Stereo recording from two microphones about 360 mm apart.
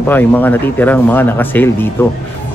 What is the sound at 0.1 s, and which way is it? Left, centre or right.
Speech, centre.